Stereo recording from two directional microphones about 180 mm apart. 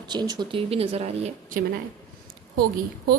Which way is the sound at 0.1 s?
25° right (ahead or behind).